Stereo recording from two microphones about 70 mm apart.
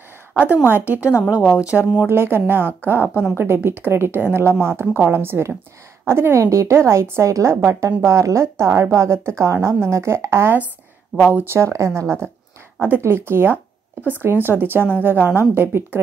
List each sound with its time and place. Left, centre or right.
0.7 s a woman's voice: right
2.0 s a woman's voice: right
11.1 s speech: centre
11.5 s a woman's voice: right